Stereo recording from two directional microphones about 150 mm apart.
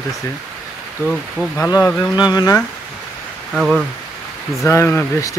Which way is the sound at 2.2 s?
30° left (ahead or behind).